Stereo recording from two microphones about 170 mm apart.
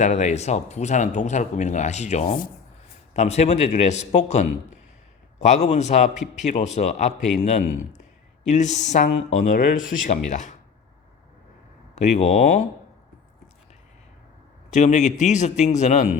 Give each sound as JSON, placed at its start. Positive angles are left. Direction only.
{"t": 0.0, "sound": "a man's voice", "side_deg": 45}
{"t": 11.9, "sound": "a man's voice", "side_deg": 45}
{"t": 14.7, "sound": "a man's voice", "side_deg": 45}